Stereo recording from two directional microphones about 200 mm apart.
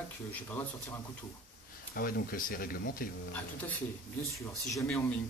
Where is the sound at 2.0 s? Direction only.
45° left (ahead or behind).